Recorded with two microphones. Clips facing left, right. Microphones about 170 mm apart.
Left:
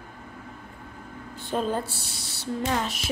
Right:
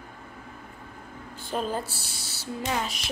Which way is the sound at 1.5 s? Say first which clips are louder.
Left 3 dB; centre (ahead or behind).